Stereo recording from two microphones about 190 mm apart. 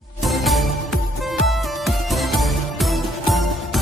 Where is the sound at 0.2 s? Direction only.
Centre (ahead or behind).